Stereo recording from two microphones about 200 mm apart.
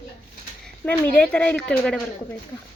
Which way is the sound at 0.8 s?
5° left (ahead or behind).